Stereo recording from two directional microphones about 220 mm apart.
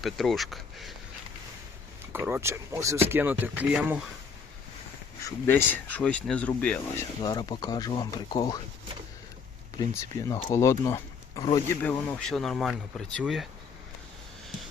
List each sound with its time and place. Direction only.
0.0 s speech: centre (ahead or behind)
2.1 s speech: 10° right (ahead or behind)
5.2 s speech: 10° left (ahead or behind)
7.2 s speech: 20° left (ahead or behind)
9.7 s speech: 15° left (ahead or behind); by 13.5 s centre (ahead or behind)